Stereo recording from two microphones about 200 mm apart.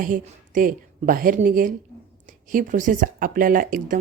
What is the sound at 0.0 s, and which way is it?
Speech, 40° right (ahead or behind).